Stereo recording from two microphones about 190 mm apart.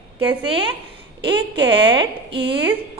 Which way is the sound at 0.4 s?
30° right (ahead or behind).